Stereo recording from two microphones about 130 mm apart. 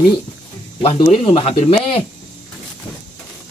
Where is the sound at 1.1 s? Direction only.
50° left (ahead or behind).